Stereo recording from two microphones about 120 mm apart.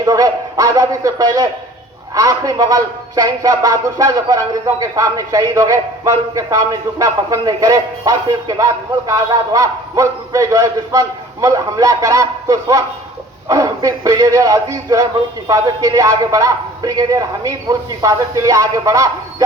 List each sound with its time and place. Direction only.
0.0 s speech: 30° right (ahead or behind)